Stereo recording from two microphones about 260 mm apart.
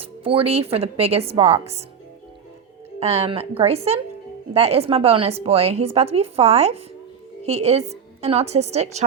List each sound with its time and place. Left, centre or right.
0.0 s speech: right
3.0 s speech: right